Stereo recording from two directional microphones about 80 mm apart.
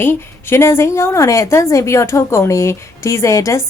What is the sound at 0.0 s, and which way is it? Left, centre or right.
A woman's voice, left.